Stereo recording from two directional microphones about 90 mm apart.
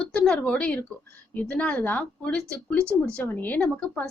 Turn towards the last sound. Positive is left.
turn(degrees=15)  # may be behind; listen again after turning